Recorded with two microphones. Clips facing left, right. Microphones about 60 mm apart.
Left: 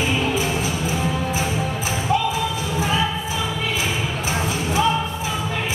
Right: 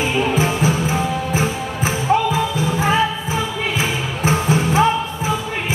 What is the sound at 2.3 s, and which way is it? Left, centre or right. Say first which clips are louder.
Music: right 4 dB; right.